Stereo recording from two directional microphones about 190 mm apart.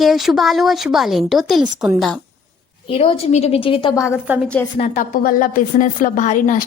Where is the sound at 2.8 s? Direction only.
30° left (ahead or behind).